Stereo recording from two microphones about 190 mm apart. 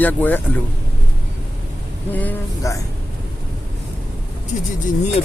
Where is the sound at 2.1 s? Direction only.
10° left (ahead or behind).